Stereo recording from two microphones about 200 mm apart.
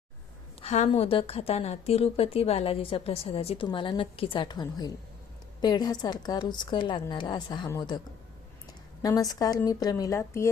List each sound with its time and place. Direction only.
0.6 s a woman's voice: 30° left (ahead or behind); by 10.5 s 15° left (ahead or behind)